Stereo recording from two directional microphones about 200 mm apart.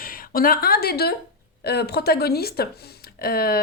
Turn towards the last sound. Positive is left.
turn(degrees=50)  # may be behind; listen again after turning